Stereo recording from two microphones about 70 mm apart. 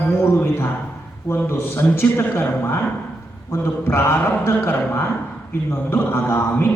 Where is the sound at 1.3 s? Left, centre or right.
Left.